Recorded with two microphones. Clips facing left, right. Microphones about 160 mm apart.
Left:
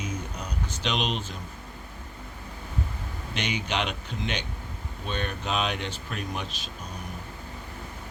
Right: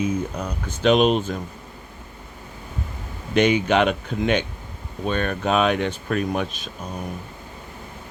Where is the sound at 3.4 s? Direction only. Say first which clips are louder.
Right 12 dB; 50° right (ahead or behind).